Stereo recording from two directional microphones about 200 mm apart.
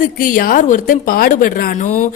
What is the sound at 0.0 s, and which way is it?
A woman's voice, 45° left (ahead or behind).